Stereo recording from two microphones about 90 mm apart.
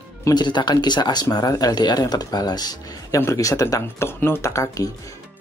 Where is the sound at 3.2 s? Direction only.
35° left (ahead or behind).